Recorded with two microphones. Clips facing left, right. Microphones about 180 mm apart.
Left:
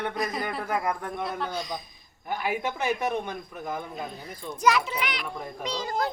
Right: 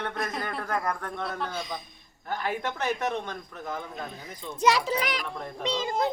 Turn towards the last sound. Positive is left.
turn(degrees=-20)  # may be behind; listen again after turning